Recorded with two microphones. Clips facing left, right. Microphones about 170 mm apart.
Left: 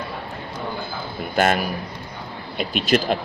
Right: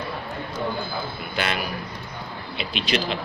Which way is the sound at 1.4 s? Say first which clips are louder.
Left 8 dB; 45° left (ahead or behind).